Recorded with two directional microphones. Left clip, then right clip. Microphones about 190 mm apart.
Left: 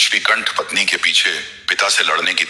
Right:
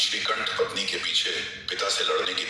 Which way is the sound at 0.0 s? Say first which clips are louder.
Left 11 dB; 20° left (ahead or behind).